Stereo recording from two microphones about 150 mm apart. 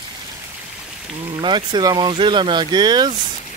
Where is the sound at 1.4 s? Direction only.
30° right (ahead or behind).